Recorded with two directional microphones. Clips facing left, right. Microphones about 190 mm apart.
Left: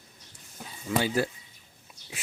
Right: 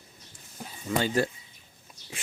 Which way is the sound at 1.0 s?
5° left (ahead or behind).